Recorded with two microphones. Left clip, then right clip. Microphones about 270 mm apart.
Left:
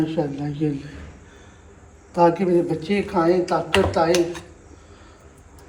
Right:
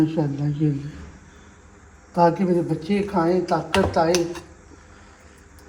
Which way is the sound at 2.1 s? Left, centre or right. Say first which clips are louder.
Left 1 dB; right.